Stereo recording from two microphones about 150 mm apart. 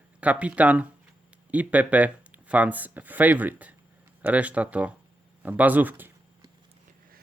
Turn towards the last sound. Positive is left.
turn(degrees=-10)  # may be behind; listen again after turning